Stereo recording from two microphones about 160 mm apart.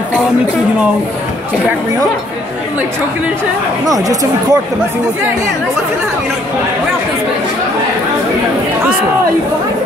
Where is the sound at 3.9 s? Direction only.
20° right (ahead or behind).